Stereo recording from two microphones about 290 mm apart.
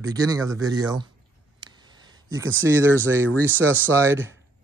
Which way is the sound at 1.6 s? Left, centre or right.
Centre.